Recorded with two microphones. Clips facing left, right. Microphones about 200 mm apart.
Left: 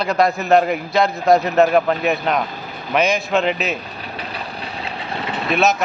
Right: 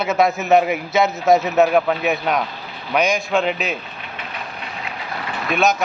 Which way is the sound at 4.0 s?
35° left (ahead or behind).